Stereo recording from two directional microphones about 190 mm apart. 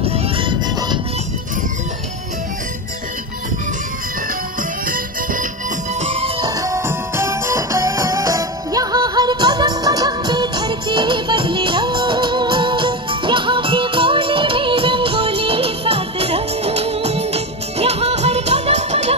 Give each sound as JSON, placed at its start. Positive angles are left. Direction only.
{"t": 0.0, "sound": "music", "side_deg": -30}
{"t": 4.8, "sound": "music", "side_deg": -45}
{"t": 5.9, "sound": "music", "side_deg": -30}
{"t": 6.5, "sound": "music", "side_deg": -15}